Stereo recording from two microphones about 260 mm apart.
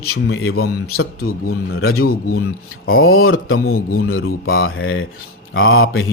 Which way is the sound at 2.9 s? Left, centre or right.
Left.